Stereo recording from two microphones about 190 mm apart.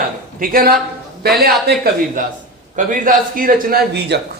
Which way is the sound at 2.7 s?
45° right (ahead or behind).